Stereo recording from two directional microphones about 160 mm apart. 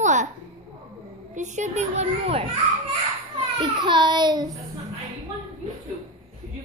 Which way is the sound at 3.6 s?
30° right (ahead or behind).